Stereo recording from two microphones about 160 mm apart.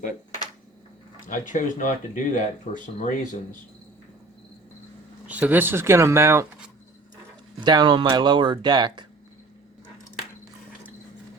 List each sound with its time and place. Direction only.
1.3 s speech: 55° left (ahead or behind)
5.3 s speech: 10° right (ahead or behind)
7.6 s speech: 25° right (ahead or behind)